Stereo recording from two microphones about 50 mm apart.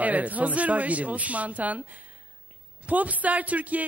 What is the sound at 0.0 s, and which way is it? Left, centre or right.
A man's voice, right.